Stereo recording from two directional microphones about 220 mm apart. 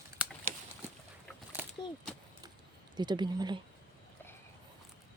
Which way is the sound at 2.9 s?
20° right (ahead or behind).